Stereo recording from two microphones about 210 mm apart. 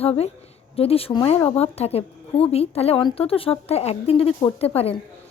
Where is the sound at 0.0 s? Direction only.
30° left (ahead or behind).